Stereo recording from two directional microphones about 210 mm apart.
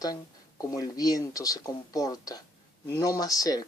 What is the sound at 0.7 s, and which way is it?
A woman's voice, 15° left (ahead or behind).